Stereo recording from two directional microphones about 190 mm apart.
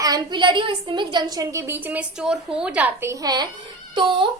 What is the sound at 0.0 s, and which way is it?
A woman's voice, 20° right (ahead or behind).